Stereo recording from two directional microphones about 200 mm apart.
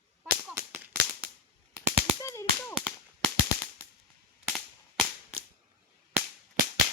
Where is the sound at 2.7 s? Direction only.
Centre (ahead or behind).